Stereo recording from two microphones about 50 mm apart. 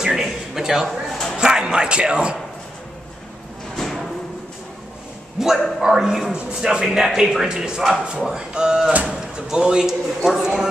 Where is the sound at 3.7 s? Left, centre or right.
Centre.